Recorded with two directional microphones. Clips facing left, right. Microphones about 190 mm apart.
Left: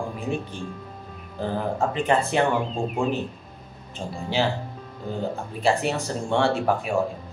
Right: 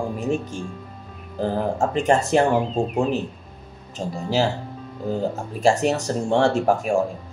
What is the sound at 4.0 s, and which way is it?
Speech, 40° right (ahead or behind).